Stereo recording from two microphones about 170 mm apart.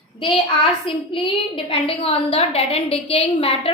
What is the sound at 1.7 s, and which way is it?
A woman's voice, 35° left (ahead or behind).